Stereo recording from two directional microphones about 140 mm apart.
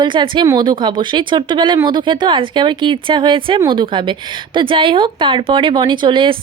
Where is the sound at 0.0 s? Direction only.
35° right (ahead or behind).